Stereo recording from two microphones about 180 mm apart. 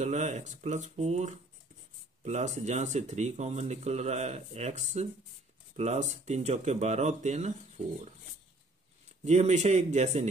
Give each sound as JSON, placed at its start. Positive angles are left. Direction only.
{"t": 0.0, "sound": "speech", "side_deg": -40}
{"t": 9.2, "sound": "speech", "side_deg": -40}